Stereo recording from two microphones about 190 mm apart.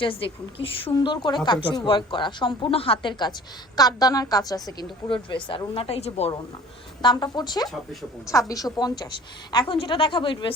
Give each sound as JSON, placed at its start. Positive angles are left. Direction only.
{"t": 0.0, "sound": "a woman's voice", "side_deg": 30}